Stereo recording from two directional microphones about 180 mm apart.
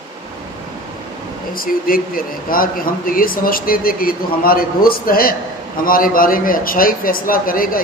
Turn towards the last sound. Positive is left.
turn(degrees=50)  # may be behind; listen again after turning